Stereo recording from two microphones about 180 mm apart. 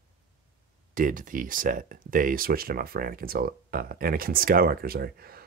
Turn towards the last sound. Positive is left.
turn(degrees=-55)  # may be behind; listen again after turning